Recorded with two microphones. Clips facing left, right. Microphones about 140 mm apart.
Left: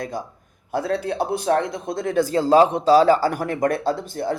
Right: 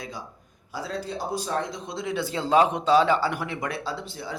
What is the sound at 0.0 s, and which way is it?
Speech, 50° left (ahead or behind).